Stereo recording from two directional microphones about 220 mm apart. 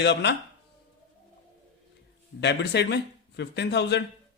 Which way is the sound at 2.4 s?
50° left (ahead or behind).